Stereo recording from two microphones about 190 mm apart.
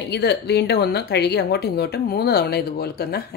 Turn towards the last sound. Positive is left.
turn(degrees=55)  # may be behind; listen again after turning